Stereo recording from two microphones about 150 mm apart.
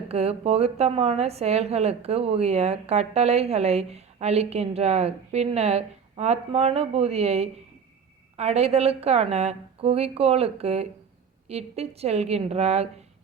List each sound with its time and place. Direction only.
0.1 s a woman's voice: 45° right (ahead or behind)